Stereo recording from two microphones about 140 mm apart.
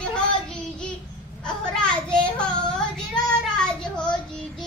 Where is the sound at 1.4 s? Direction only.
5° left (ahead or behind).